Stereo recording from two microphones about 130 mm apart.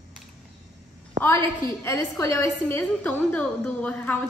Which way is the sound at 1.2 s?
20° left (ahead or behind).